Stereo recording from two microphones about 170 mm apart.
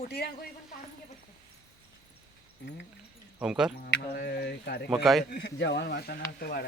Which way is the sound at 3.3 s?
5° right (ahead or behind).